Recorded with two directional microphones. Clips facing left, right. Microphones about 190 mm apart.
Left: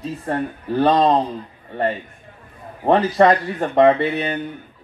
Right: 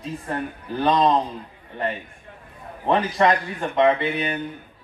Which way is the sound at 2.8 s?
35° left (ahead or behind).